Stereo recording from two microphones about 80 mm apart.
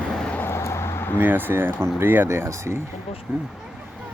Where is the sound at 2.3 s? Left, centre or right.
Right.